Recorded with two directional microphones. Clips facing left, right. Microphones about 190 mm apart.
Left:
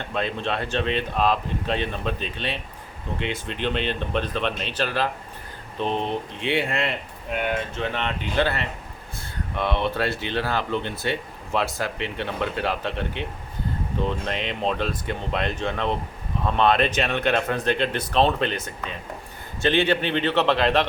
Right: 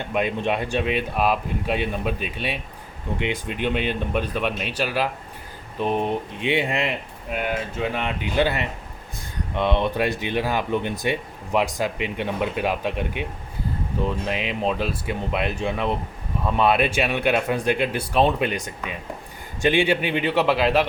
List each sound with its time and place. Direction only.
0.0 s speech: 15° right (ahead or behind)
7.3 s speech: 5° right (ahead or behind)